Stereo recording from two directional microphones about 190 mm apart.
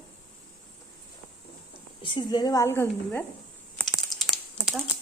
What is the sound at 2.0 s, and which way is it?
A woman's voice, 25° left (ahead or behind).